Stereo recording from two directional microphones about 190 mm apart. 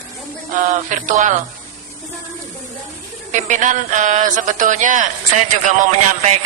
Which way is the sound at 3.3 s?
40° right (ahead or behind).